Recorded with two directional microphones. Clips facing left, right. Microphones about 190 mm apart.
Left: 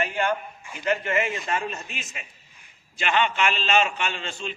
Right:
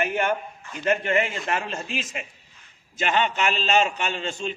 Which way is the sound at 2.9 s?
40° right (ahead or behind).